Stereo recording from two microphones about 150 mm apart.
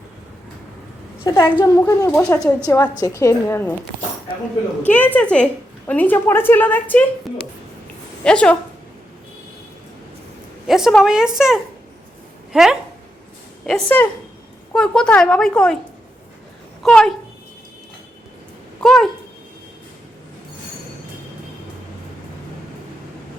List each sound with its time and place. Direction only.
1.2 s a woman's voice: 20° left (ahead or behind)
4.8 s a woman's voice: 10° left (ahead or behind)
8.2 s a woman's voice: 5° left (ahead or behind)
10.7 s speech: centre (ahead or behind)
13.7 s a woman's voice: 5° left (ahead or behind)
16.8 s speech: 5° left (ahead or behind)
18.8 s speech: 5° left (ahead or behind)